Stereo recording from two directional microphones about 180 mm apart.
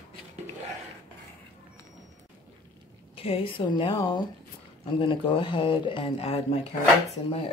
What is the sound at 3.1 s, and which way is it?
Speech, 30° left (ahead or behind).